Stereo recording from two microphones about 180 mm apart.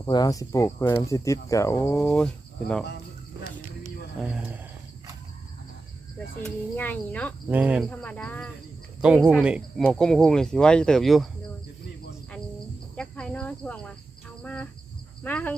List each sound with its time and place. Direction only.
0.0 s speech: 20° left (ahead or behind); by 2.8 s 5° left (ahead or behind)
4.2 s a man's voice: 5° right (ahead or behind)
6.1 s speech: 5° left (ahead or behind)
7.5 s a man's voice: 5° right (ahead or behind)
7.9 s speech: 5° left (ahead or behind)
9.0 s speech: 5° right (ahead or behind)
13.0 s speech: 5° left (ahead or behind)